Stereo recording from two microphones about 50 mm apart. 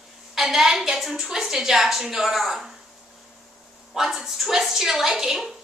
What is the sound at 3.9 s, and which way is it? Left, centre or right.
A woman's voice, centre.